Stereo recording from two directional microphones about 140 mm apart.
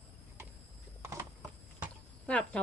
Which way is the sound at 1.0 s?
20° right (ahead or behind).